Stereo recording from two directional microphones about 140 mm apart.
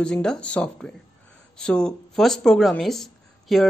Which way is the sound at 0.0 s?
5° left (ahead or behind).